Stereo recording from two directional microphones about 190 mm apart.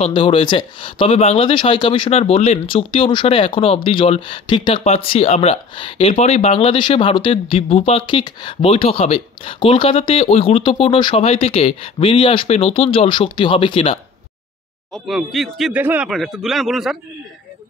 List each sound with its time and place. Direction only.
0.0 s speech: 25° left (ahead or behind)
15.0 s a man's voice: centre (ahead or behind)